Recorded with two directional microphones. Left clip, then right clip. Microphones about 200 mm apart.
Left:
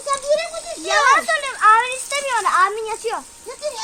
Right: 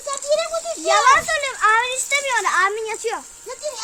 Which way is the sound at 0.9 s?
55° right (ahead or behind).